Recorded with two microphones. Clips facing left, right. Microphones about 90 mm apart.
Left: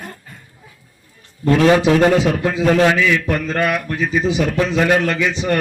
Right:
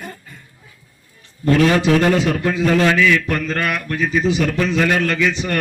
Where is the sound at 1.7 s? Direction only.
20° left (ahead or behind).